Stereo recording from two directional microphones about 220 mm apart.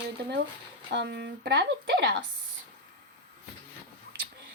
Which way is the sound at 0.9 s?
50° right (ahead or behind).